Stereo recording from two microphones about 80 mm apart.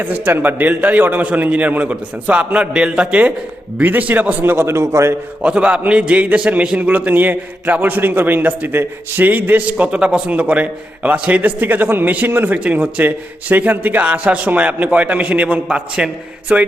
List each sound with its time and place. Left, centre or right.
0.0 s a man's voice: right
5.4 s a man's voice: centre